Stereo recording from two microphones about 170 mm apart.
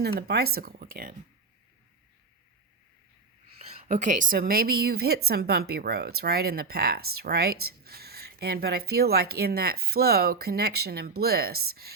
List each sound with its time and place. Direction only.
0.0 s a woman's voice: 70° right (ahead or behind)
3.9 s a woman's voice: 50° right (ahead or behind); by 11.9 s 65° right (ahead or behind)